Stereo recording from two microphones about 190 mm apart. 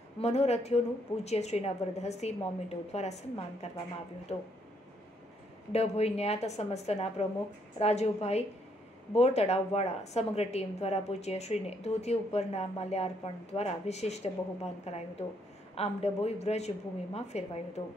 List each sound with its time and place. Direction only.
0.2 s a woman's voice: 35° left (ahead or behind)
5.7 s a woman's voice: 35° left (ahead or behind)
17.8 s speech: 25° left (ahead or behind)